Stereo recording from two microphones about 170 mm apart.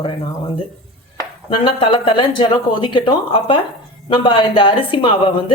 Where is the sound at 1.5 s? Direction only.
30° left (ahead or behind).